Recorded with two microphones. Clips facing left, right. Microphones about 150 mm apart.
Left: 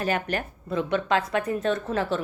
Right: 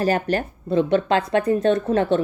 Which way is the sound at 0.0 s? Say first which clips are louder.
Right 6 dB; 35° right (ahead or behind).